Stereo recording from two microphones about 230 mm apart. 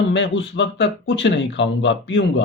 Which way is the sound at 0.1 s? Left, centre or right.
Left.